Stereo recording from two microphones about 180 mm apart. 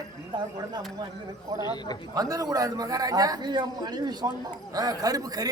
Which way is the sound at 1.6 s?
20° left (ahead or behind).